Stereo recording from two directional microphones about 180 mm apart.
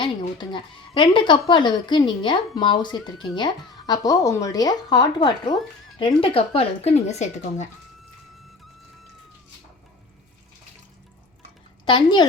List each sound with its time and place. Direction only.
0.0 s speech: 25° left (ahead or behind)
11.9 s speech: 25° left (ahead or behind)